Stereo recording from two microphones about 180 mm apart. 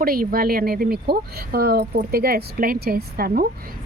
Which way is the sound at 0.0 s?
55° right (ahead or behind).